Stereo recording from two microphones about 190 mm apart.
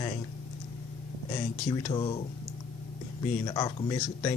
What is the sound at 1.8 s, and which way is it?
Speech, 30° left (ahead or behind).